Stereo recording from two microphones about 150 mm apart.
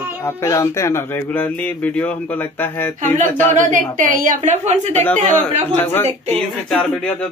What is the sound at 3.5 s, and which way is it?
A woman's voice, 60° right (ahead or behind).